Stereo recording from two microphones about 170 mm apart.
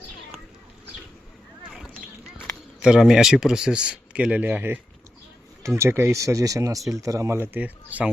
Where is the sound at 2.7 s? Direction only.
5° right (ahead or behind).